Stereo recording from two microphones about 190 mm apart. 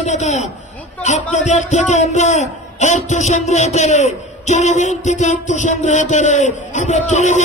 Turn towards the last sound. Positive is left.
turn(degrees=40)  # may be behind; listen again after turning